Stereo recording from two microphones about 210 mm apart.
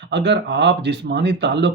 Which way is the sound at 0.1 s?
55° right (ahead or behind).